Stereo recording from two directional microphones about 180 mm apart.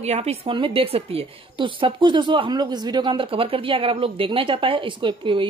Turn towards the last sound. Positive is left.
turn(degrees=-25)  # may be behind; listen again after turning